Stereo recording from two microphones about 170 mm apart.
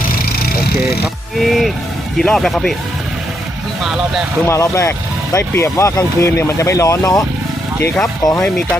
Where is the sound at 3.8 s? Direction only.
Centre (ahead or behind).